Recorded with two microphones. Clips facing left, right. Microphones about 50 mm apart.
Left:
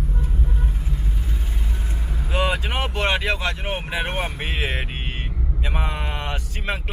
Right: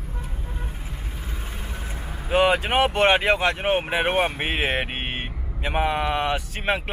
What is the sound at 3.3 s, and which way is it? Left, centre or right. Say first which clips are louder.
Speech: right 5 dB; right.